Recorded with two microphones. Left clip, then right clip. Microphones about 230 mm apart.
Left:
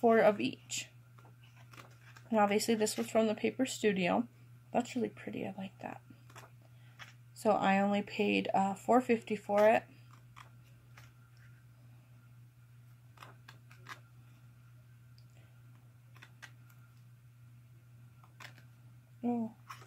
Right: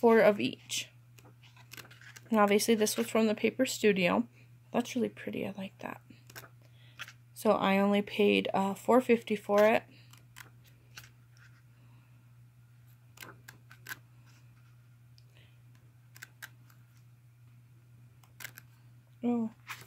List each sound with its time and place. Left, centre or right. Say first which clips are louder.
0.0 s speech: right 3 dB; right
2.2 s speech: right 4 dB; right
7.3 s speech: right 2 dB; right
19.2 s a sound: right 3 dB; right